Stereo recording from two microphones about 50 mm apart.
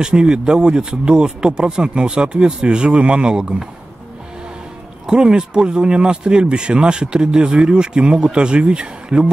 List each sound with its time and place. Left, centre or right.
0.0 s speech: centre
5.0 s speech: centre